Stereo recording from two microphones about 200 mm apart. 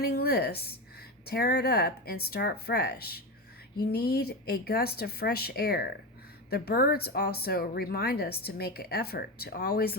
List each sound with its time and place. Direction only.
0.0 s a woman's voice: 50° left (ahead or behind)